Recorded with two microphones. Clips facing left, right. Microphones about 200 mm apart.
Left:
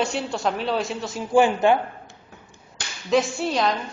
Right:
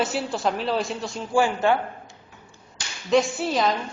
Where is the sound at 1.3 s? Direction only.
20° left (ahead or behind).